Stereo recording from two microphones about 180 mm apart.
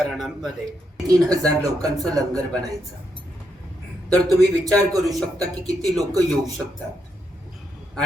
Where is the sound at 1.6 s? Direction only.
20° right (ahead or behind).